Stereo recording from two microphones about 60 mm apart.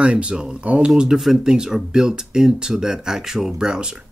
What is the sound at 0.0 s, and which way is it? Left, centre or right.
Speech, centre.